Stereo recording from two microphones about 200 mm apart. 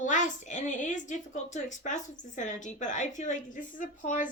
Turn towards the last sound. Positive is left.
turn(degrees=40)  # may be behind; listen again after turning